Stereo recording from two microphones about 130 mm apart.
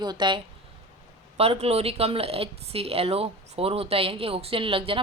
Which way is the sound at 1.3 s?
50° right (ahead or behind).